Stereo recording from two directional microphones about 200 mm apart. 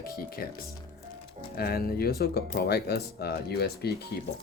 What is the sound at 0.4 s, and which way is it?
Speech, 45° left (ahead or behind).